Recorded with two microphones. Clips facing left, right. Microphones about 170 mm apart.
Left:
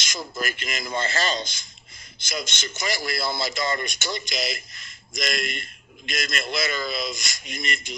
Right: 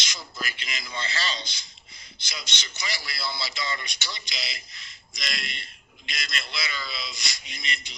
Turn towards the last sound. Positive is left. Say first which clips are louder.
# left 6 dB
turn(degrees=50)  # may be behind; listen again after turning